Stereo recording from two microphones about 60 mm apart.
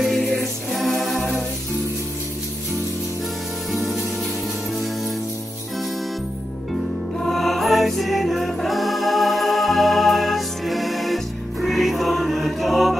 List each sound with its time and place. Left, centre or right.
0.0 s music: centre
3.7 s music: centre
7.2 s music: centre